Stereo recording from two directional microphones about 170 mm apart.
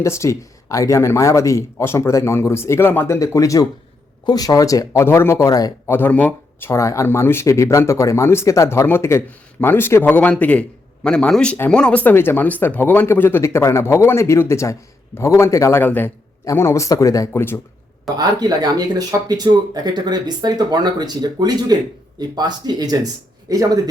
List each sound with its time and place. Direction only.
0.0 s speech: 15° left (ahead or behind)
18.2 s speech: 25° right (ahead or behind)